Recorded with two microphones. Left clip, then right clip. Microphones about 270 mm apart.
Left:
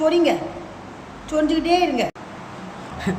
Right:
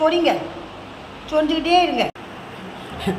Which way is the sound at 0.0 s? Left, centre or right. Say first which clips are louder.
Right 1 dB; centre.